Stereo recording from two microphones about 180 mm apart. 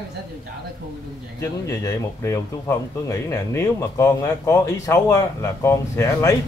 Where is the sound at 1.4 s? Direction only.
15° left (ahead or behind).